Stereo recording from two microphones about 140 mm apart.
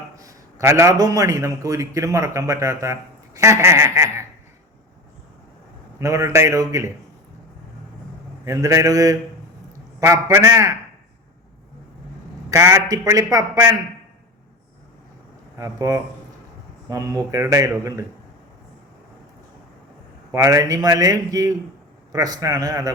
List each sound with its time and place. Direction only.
0.2 s a man's voice: 20° right (ahead or behind)
6.0 s a man's voice: 20° right (ahead or behind)
8.4 s a man's voice: 20° right (ahead or behind)
12.5 s a man's voice: 20° right (ahead or behind)
15.5 s a man's voice: 20° right (ahead or behind)
17.3 s a man's voice: 20° right (ahead or behind)
20.3 s a man's voice: 25° right (ahead or behind)